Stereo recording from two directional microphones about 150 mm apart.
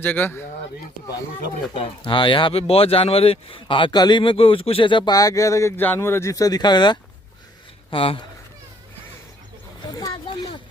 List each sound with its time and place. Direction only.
0.0 s speech: 15° left (ahead or behind)
1.7 s speech: 35° left (ahead or behind)
9.9 s a sound: 30° left (ahead or behind)